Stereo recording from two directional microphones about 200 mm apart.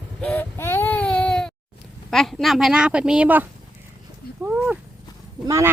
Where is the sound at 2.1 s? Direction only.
Centre (ahead or behind).